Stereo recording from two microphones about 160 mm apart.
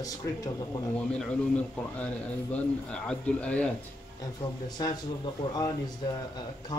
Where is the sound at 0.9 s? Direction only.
5° left (ahead or behind).